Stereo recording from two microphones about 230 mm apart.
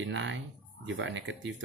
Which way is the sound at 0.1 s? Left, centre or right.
Right.